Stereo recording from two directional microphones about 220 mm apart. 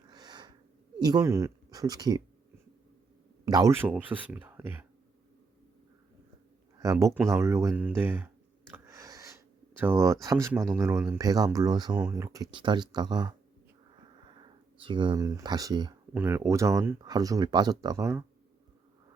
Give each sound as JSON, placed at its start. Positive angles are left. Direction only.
{"t": 0.1, "sound": "wheeze", "side_deg": -20}
{"t": 1.0, "sound": "speech", "side_deg": -15}
{"t": 3.4, "sound": "speech", "side_deg": -15}
{"t": 6.7, "sound": "speech", "side_deg": -15}
{"t": 8.7, "sound": "a sound", "side_deg": -15}
{"t": 9.7, "sound": "speech", "side_deg": -10}